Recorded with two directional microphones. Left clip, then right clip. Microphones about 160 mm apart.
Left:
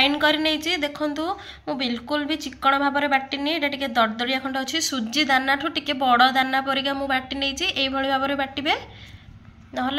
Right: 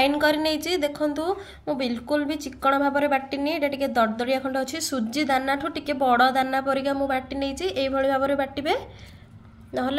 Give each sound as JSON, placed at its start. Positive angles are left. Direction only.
{"t": 0.0, "sound": "a woman's voice", "side_deg": -55}